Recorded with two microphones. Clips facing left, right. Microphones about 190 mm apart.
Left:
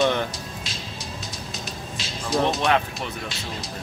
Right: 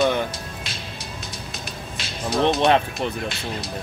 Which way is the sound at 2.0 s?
60° right (ahead or behind).